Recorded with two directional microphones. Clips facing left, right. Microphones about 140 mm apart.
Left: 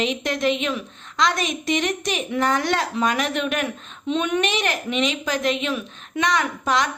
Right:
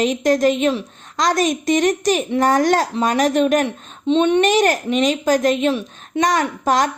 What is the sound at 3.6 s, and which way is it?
Speech, 30° right (ahead or behind).